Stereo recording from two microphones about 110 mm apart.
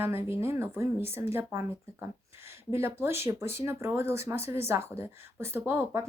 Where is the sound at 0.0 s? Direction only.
20° right (ahead or behind).